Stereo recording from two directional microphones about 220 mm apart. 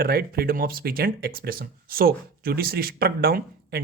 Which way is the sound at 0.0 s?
45° right (ahead or behind).